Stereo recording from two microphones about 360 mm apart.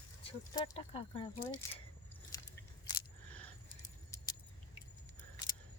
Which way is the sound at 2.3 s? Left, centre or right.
Centre.